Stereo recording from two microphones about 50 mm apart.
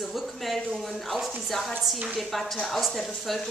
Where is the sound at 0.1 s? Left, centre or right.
Centre.